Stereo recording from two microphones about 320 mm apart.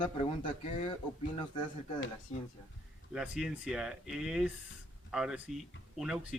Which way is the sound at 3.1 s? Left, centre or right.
Centre.